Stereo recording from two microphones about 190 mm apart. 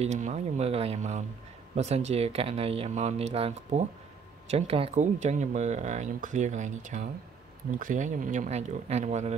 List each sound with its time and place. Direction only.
0.0 s speech: 35° right (ahead or behind)